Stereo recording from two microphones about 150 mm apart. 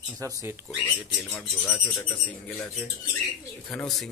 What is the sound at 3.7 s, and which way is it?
Speech, 5° left (ahead or behind).